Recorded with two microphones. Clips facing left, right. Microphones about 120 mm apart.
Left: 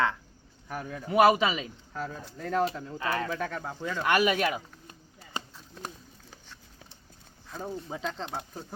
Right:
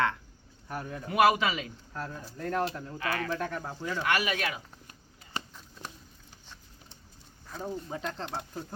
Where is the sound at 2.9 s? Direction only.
30° left (ahead or behind).